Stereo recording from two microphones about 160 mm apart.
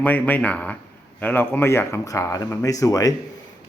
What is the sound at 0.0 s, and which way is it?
A man's voice, 10° left (ahead or behind).